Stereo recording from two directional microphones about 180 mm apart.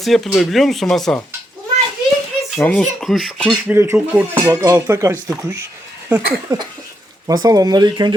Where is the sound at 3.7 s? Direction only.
10° right (ahead or behind).